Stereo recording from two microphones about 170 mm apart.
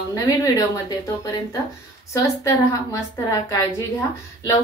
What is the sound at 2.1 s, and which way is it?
Speech, 20° left (ahead or behind).